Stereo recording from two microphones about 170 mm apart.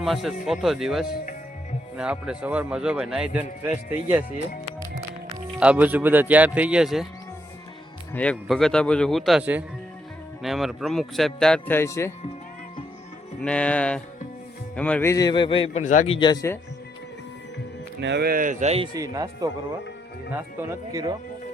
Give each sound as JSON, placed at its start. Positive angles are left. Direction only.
{"t": 0.0, "sound": "a man's voice", "side_deg": 0}
{"t": 1.1, "sound": "a man's voice", "side_deg": 50}
{"t": 2.0, "sound": "speech", "side_deg": -5}
{"t": 5.5, "sound": "speech", "side_deg": -10}
{"t": 8.1, "sound": "a man's voice", "side_deg": 5}
{"t": 13.4, "sound": "speech", "side_deg": 5}
{"t": 15.1, "sound": "speech", "side_deg": 25}
{"t": 15.8, "sound": "a man's voice", "side_deg": 45}
{"t": 16.1, "sound": "speech", "side_deg": 25}
{"t": 18.0, "sound": "speech", "side_deg": -80}
{"t": 18.9, "sound": "speech", "side_deg": -20}